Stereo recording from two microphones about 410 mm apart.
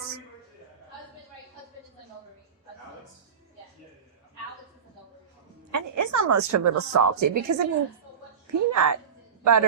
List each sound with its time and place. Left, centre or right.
5.7 s a woman's voice: right
8.7 s a woman's voice: right